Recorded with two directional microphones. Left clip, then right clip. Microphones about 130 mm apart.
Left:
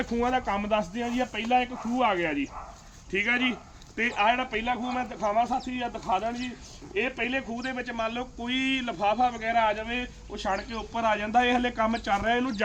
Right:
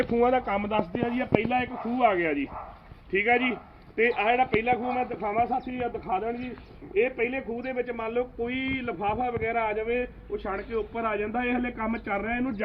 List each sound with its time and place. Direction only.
0.2 s speech: 90° left; by 12.6 s 55° left (ahead or behind)